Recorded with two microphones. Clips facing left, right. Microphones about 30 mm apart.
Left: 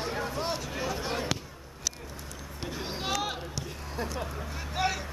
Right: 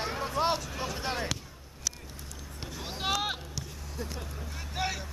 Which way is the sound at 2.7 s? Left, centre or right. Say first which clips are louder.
Left 3 dB; left.